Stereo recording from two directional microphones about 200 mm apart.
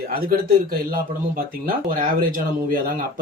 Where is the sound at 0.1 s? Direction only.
45° right (ahead or behind).